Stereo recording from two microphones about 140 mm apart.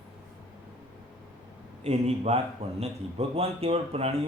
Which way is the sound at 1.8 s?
50° right (ahead or behind).